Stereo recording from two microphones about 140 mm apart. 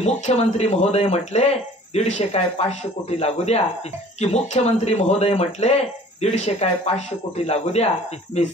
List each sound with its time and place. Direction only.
0.0 s speech: 50° left (ahead or behind)